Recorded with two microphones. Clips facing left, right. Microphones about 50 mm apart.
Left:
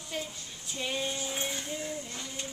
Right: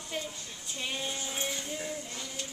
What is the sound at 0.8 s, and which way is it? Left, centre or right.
Female singing, centre.